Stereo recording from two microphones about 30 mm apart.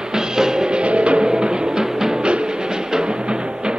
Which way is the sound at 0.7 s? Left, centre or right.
Right.